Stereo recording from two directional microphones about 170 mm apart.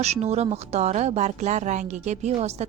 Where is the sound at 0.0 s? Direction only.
40° right (ahead or behind).